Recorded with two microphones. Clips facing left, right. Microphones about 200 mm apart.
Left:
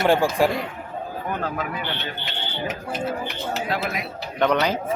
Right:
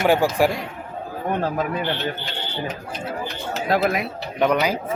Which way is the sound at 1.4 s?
35° right (ahead or behind).